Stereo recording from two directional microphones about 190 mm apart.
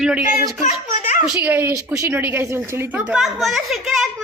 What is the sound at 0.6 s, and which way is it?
Speech, 40° left (ahead or behind).